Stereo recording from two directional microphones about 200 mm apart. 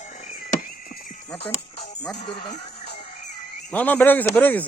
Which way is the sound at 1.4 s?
30° left (ahead or behind).